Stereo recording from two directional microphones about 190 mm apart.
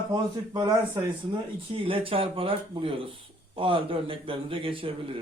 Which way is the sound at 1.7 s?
30° right (ahead or behind).